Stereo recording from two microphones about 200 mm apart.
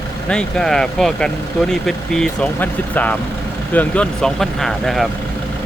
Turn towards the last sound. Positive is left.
turn(degrees=0)  # may be behind; listen again after turning